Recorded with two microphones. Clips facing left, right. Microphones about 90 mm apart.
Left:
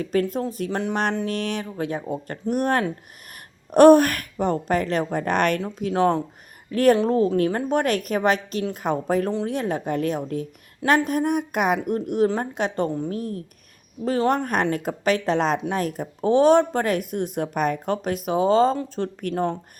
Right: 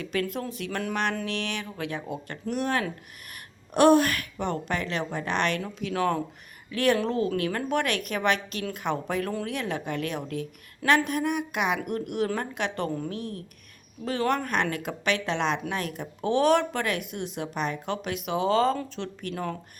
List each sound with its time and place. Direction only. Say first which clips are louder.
0.0 s a woman's voice: left 7 dB; 40° left (ahead or behind)
5.6 s speech: left 6 dB; 30° left (ahead or behind)
6.7 s a woman's voice: left 7 dB; 45° left (ahead or behind)